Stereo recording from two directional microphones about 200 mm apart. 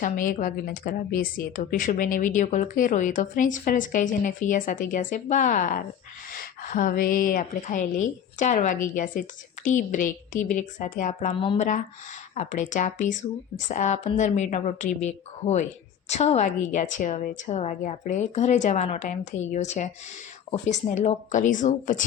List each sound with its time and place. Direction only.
0.0 s a woman's voice: 40° left (ahead or behind)